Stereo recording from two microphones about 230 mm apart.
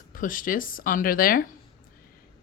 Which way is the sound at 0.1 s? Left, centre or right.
Left.